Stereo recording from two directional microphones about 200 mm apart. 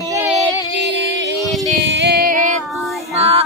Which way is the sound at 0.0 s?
15° right (ahead or behind).